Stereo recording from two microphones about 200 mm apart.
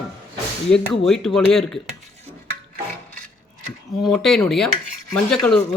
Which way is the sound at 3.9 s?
Centre (ahead or behind).